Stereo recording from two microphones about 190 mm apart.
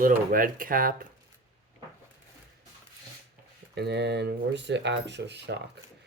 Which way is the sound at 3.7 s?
60° right (ahead or behind).